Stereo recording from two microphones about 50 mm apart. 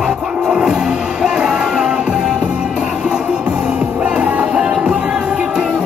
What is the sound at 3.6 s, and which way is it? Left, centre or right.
Music, right.